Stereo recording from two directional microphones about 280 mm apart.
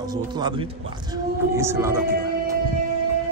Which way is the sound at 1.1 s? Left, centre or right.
Centre.